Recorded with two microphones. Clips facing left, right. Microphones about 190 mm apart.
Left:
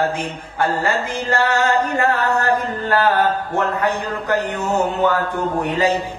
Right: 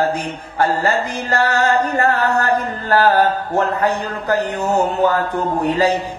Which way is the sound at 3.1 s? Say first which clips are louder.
Right 2 dB; 35° right (ahead or behind).